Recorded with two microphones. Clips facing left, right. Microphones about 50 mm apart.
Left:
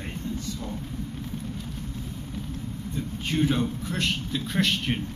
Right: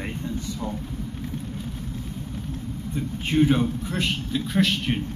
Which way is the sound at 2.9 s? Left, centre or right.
Centre.